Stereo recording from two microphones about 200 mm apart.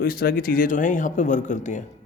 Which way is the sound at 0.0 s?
45° left (ahead or behind).